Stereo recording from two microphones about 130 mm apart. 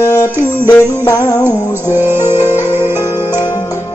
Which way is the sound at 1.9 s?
15° right (ahead or behind).